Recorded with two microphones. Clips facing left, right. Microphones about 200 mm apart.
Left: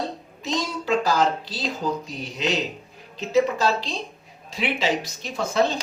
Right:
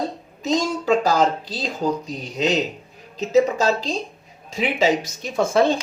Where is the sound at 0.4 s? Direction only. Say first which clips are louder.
Right 6 dB; 45° right (ahead or behind).